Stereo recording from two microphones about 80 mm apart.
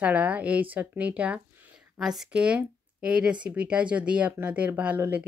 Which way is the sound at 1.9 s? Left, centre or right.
Centre.